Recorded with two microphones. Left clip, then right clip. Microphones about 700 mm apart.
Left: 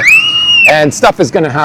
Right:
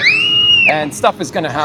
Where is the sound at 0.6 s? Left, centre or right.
Left.